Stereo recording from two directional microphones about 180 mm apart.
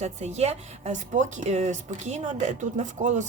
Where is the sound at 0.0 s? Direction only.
40° right (ahead or behind).